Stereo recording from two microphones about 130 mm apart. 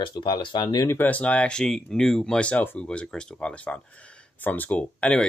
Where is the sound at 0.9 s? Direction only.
15° left (ahead or behind).